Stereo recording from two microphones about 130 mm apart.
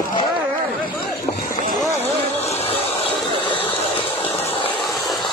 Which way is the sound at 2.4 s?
50° left (ahead or behind).